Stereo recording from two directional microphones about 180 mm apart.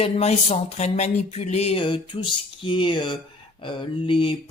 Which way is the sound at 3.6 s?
30° left (ahead or behind).